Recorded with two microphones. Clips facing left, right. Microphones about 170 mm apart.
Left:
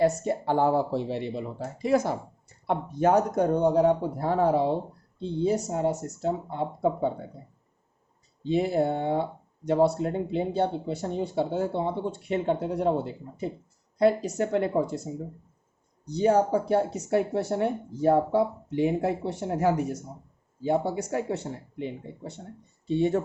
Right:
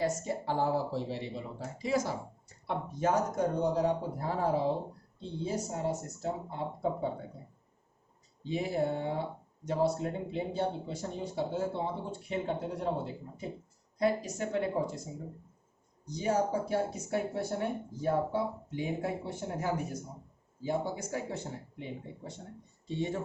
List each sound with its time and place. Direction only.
0.0 s speech: 65° left (ahead or behind)
8.4 s speech: 70° left (ahead or behind)
14.0 s speech: 65° left (ahead or behind)
16.0 s speech: 65° left (ahead or behind)
22.9 s speech: 65° left (ahead or behind)